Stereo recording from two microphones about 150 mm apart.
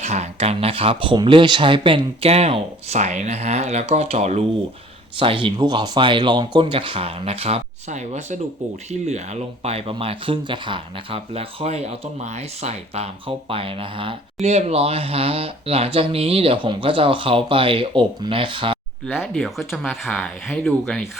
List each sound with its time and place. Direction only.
0.0 s speech: 45° right (ahead or behind)
19.1 s speech: centre (ahead or behind)
20.5 s speech: 10° left (ahead or behind)